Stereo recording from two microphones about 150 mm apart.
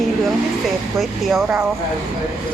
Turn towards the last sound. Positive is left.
turn(degrees=0)  # may be behind; listen again after turning